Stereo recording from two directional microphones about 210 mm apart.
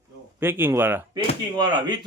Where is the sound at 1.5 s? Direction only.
20° right (ahead or behind).